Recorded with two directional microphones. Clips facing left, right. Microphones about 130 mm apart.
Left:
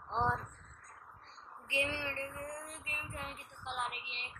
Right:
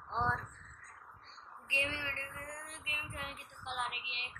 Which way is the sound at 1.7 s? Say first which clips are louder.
Left 3 dB; 55° left (ahead or behind).